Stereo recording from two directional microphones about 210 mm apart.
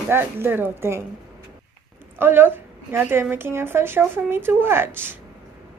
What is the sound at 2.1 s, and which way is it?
A woman's voice, 10° right (ahead or behind).